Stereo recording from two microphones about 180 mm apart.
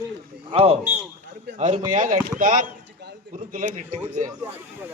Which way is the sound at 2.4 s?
50° right (ahead or behind).